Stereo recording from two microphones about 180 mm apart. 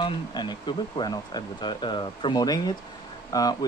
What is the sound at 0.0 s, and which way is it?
Speech, 25° left (ahead or behind).